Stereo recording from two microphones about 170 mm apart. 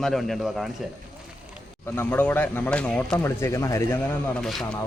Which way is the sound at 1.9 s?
10° left (ahead or behind).